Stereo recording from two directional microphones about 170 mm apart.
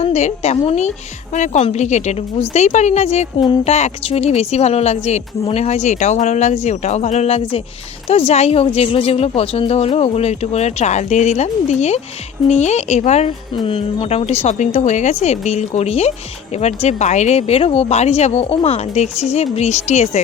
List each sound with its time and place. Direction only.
0.0 s speech: 40° left (ahead or behind)
13.5 s speech: 30° left (ahead or behind)